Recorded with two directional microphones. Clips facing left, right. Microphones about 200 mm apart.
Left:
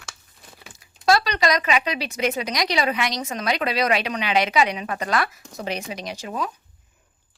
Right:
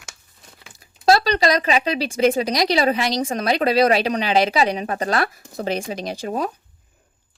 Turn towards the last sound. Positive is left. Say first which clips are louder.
# right 5 dB
turn(degrees=-40)  # may be behind; listen again after turning